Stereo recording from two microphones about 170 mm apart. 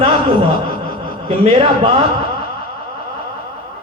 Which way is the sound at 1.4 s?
35° right (ahead or behind).